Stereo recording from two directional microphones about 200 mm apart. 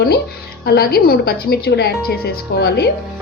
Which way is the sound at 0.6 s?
50° left (ahead or behind).